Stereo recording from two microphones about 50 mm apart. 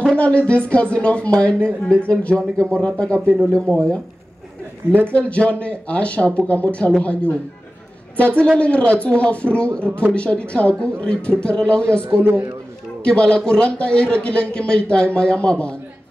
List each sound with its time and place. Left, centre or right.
0.1 s a man's voice: left
3.3 s a man's voice: right
3.5 s speech: centre
5.1 s a man's voice: left
12.0 s speech: right
13.0 s a man's voice: centre